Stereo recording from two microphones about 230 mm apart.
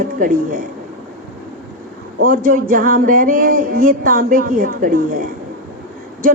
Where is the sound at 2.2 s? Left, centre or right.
Right.